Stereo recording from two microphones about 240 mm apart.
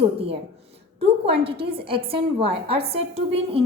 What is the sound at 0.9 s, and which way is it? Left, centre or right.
A woman's voice, right.